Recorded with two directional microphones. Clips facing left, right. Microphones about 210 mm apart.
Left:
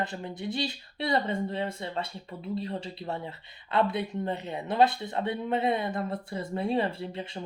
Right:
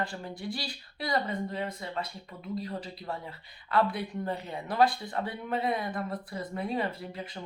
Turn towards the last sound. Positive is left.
turn(degrees=25)  # may be behind; listen again after turning